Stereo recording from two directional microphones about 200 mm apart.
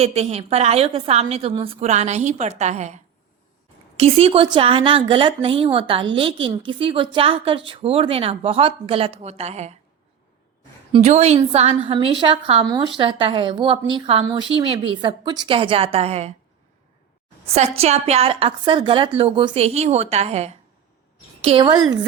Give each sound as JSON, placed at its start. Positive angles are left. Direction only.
{"t": 0.0, "sound": "a woman's voice", "side_deg": -30}
{"t": 10.9, "sound": "a woman's voice", "side_deg": -30}
{"t": 17.5, "sound": "a woman's voice", "side_deg": -35}